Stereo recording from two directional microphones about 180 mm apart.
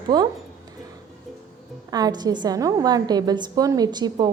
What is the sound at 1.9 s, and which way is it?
A woman's voice, 20° right (ahead or behind).